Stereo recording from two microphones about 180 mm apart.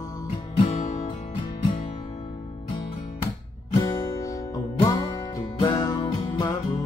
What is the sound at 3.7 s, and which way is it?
Music, 25° left (ahead or behind).